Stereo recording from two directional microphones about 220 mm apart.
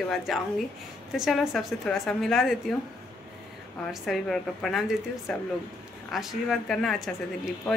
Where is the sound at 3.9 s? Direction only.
Centre (ahead or behind).